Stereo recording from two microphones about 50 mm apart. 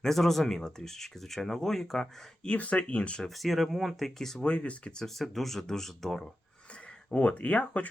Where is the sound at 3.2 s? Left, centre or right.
Centre.